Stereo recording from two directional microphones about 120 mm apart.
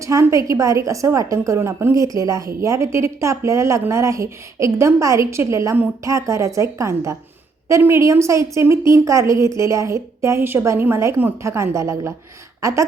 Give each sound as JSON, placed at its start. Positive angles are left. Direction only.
{"t": 0.0, "sound": "a woman's voice", "side_deg": -25}